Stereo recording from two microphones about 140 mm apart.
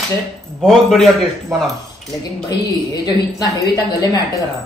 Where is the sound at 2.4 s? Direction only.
30° left (ahead or behind).